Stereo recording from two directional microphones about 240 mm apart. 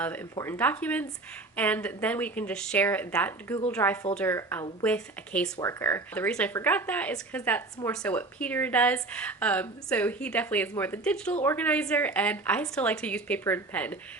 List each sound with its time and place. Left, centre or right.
0.0 s a woman's voice: centre